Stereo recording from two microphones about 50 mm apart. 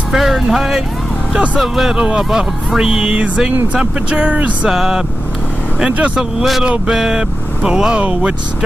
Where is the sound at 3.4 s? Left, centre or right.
Centre.